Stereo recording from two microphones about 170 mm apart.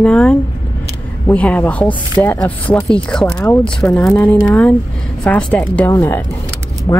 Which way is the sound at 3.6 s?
5° left (ahead or behind).